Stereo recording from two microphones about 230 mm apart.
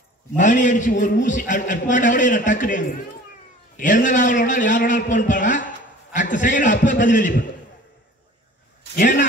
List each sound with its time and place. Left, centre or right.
0.4 s a man's voice: left
8.9 s a man's voice: left